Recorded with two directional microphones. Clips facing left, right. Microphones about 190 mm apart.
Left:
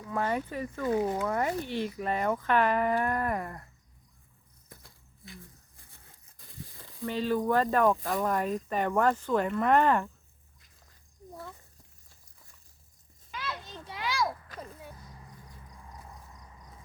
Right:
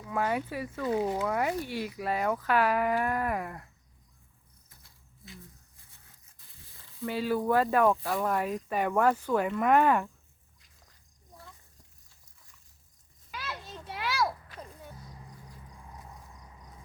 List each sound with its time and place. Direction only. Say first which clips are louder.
0.1 s speech: even; 5° right (ahead or behind)
4.7 s a sound: left 9 dB; 55° left (ahead or behind)
6.6 s sizzle: left 15 dB; 45° left (ahead or behind)
7.0 s speech: even; 10° right (ahead or behind)
13.3 s children playing: left 1 dB; 10° right (ahead or behind)
15.6 s vehicle: even; 10° right (ahead or behind)